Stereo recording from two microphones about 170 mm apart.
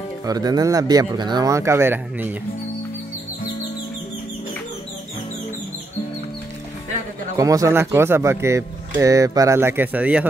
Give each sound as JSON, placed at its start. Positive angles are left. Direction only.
{"t": 0.2, "sound": "speech", "side_deg": -20}
{"t": 7.3, "sound": "speech", "side_deg": -20}